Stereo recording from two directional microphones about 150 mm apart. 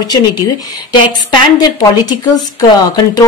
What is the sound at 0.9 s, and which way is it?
A woman's voice, 30° left (ahead or behind).